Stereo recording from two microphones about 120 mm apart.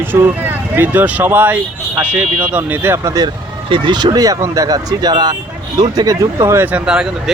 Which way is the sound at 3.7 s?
40° right (ahead or behind).